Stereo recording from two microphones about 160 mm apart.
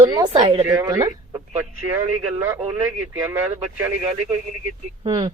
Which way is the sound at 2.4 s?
10° right (ahead or behind).